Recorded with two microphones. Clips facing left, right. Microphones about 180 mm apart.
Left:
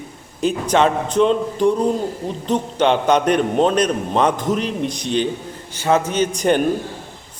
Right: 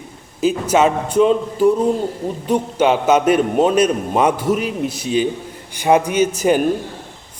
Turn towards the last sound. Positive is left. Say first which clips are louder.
# right 2 dB
turn(degrees=-5)  # may be behind; listen again after turning